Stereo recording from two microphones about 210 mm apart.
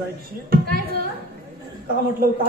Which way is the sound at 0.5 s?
45° right (ahead or behind).